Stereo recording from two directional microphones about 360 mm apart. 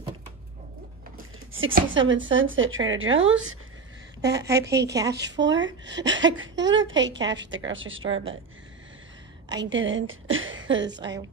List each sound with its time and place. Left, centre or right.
1.1 s a sound: right
2.3 s a woman's voice: right
4.2 s a woman's voice: centre
5.1 s a woman's voice: right
9.7 s a woman's voice: right